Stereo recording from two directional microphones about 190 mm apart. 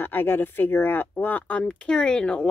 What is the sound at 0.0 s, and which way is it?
Speech, 10° left (ahead or behind).